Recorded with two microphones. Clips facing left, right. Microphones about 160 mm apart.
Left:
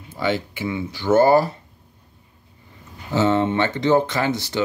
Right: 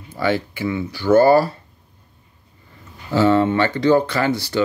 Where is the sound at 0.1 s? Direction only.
20° left (ahead or behind).